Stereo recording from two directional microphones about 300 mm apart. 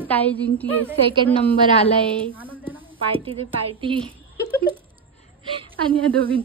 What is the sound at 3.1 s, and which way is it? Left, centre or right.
A woman's voice, centre.